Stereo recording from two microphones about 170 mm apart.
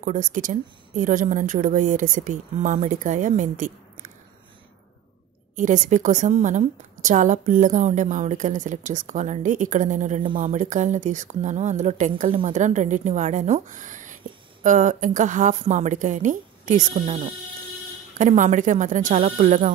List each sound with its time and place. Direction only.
0.0 s a woman's voice: 50° right (ahead or behind)
5.6 s a woman's voice: 50° right (ahead or behind)